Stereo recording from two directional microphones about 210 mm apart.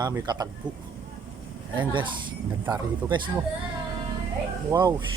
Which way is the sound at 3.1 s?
20° right (ahead or behind).